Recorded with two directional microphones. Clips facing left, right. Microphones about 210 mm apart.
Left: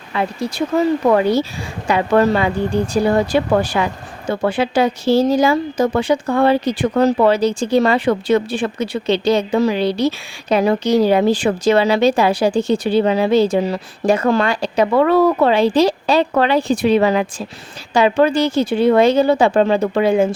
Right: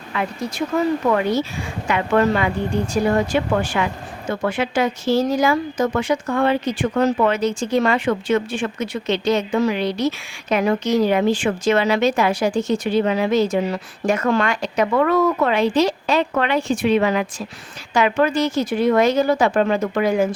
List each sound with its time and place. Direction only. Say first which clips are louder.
0.1 s speech: left 4 dB; 30° left (ahead or behind)